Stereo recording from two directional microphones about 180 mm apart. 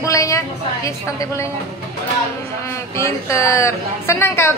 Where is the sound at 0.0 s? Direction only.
15° left (ahead or behind).